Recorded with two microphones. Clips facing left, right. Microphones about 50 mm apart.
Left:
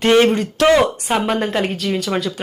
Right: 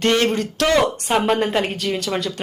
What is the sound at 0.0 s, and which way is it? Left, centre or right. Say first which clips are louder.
A woman's voice: left 5 dB; centre.